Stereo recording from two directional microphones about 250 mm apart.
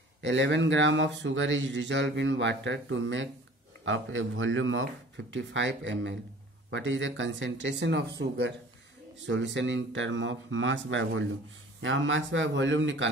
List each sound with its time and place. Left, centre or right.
0.2 s speech: right